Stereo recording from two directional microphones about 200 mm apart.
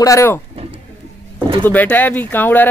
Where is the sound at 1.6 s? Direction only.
10° left (ahead or behind).